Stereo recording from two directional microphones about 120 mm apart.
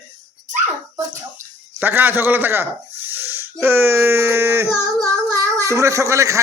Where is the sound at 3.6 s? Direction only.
20° right (ahead or behind).